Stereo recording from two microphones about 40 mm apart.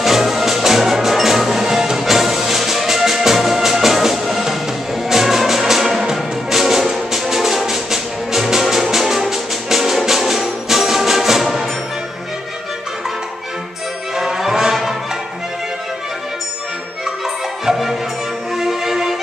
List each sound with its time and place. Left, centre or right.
0.0 s music: centre
14.1 s music: centre
17.6 s music: centre